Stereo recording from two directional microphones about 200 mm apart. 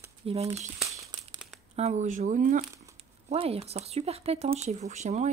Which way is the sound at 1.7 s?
35° right (ahead or behind).